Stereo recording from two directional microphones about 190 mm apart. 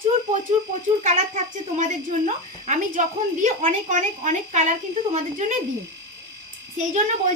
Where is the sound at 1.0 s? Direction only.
40° right (ahead or behind).